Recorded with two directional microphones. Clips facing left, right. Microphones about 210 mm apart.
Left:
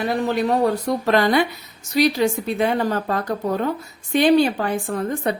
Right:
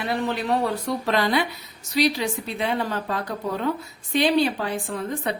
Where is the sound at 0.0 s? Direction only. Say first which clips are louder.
Left 5 dB; 45° left (ahead or behind).